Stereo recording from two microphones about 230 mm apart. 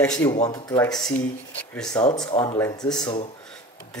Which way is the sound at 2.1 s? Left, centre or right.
Centre.